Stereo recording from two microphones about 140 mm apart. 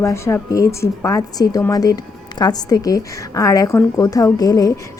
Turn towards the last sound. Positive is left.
turn(degrees=25)  # may be behind; listen again after turning